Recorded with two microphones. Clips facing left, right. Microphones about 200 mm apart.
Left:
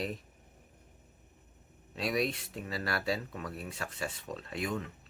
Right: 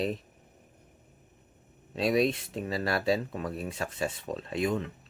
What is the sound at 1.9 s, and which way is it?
Speech, 25° right (ahead or behind).